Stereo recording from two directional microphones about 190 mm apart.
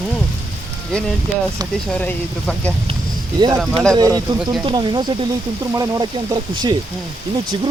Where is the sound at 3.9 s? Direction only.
20° right (ahead or behind).